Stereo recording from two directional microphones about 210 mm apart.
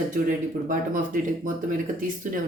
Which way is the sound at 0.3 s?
40° right (ahead or behind).